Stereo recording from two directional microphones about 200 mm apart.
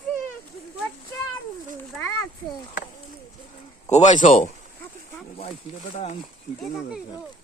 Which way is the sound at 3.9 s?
35° left (ahead or behind).